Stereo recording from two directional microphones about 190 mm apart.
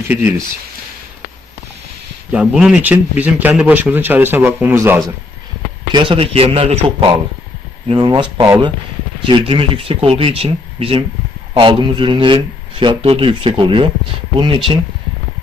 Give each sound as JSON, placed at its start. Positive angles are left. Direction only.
{"t": 0.1, "sound": "a man's voice", "side_deg": -10}
{"t": 2.3, "sound": "a man's voice", "side_deg": -5}
{"t": 5.9, "sound": "a man's voice", "side_deg": -25}